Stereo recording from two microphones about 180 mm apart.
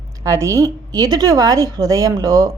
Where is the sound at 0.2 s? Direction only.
15° right (ahead or behind).